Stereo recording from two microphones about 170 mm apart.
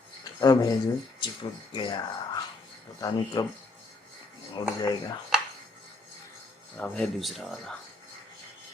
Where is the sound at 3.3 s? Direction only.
25° left (ahead or behind).